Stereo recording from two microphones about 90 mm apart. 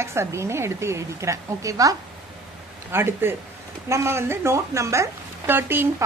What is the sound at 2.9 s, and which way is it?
A woman's voice, 25° right (ahead or behind).